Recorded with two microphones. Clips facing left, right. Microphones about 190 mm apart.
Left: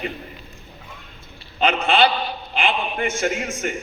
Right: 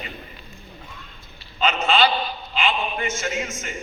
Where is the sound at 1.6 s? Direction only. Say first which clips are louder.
Left 2 dB; 55° left (ahead or behind).